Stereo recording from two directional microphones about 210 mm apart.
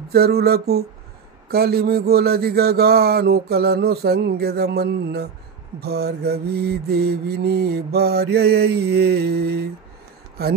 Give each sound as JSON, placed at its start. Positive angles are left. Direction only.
{"t": 0.1, "sound": "mantra", "side_deg": -50}